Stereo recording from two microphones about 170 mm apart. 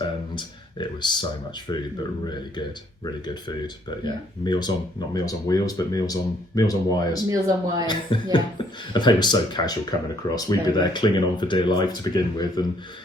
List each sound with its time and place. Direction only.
0.3 s a sound: 25° left (ahead or behind)
1.7 s speech: 25° left (ahead or behind)
7.3 s speech: 20° right (ahead or behind)
7.9 s speech: 25° left (ahead or behind)